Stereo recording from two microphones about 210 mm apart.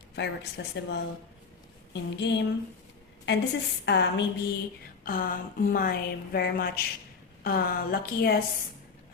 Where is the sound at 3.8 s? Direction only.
55° left (ahead or behind).